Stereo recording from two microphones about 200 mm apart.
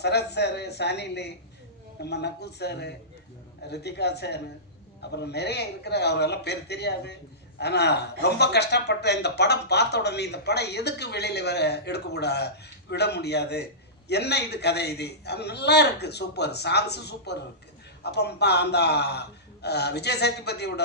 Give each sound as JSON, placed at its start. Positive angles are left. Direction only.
{"t": 0.0, "sound": "speech", "side_deg": 55}